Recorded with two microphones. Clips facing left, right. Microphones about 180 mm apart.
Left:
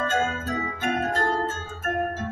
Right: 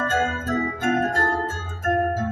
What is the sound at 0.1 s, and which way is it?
Organ, 45° right (ahead or behind).